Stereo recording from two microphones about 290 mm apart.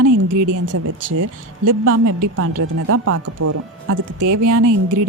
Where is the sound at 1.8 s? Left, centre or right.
Right.